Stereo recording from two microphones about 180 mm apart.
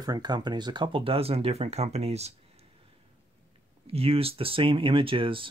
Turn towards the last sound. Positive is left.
turn(degrees=-30)  # may be behind; listen again after turning